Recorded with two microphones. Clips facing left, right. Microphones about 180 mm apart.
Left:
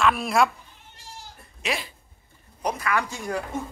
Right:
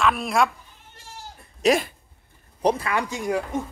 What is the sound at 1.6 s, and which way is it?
Speech, 45° right (ahead or behind).